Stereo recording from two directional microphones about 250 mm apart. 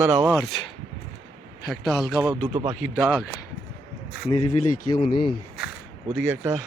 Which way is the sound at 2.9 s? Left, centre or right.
Centre.